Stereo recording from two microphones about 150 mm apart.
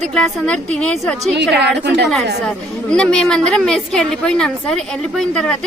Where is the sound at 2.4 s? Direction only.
5° left (ahead or behind).